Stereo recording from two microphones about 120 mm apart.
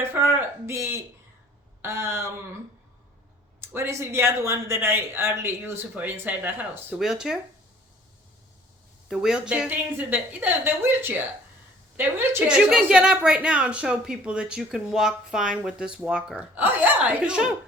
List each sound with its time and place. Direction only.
0.0 s speech: 15° right (ahead or behind)
3.6 s a woman's voice: 20° right (ahead or behind); by 7.3 s 5° right (ahead or behind)
9.0 s a woman's voice: 5° right (ahead or behind)